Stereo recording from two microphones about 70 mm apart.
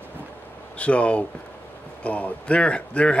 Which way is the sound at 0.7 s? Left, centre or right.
Centre.